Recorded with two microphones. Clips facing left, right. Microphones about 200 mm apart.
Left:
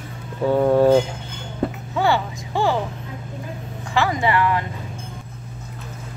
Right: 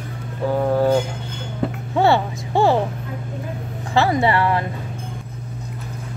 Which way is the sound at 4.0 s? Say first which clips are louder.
Right 2 dB; 35° right (ahead or behind).